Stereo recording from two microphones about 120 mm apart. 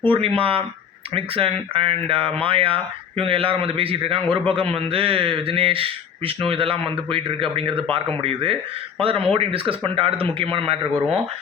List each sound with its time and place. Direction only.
0.0 s speech: 50° right (ahead or behind)